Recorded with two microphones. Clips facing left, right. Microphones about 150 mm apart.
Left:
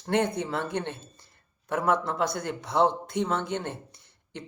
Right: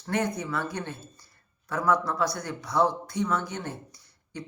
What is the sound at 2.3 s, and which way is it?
Speech, 55° left (ahead or behind).